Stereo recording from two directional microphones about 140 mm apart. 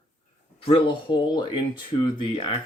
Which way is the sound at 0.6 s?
40° left (ahead or behind).